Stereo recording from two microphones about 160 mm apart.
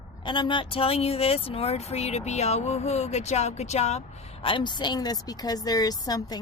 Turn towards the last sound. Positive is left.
turn(degrees=25)  # may be behind; listen again after turning